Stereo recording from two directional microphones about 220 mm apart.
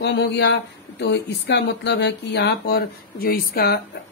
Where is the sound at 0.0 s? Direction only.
50° left (ahead or behind).